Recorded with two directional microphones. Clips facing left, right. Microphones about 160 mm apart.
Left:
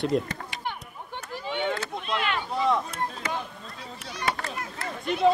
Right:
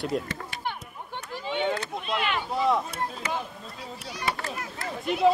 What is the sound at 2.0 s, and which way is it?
Speech, centre (ahead or behind).